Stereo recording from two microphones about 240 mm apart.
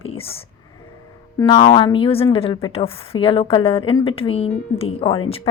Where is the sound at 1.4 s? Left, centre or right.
Centre.